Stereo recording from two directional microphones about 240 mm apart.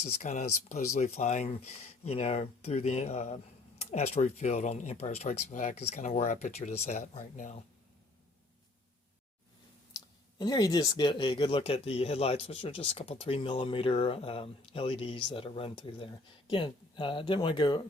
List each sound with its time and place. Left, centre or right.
0.0 s speech: left
9.9 s speech: centre